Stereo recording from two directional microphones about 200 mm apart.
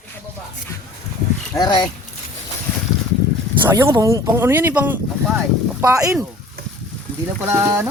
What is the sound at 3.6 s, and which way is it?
Speech, 15° right (ahead or behind).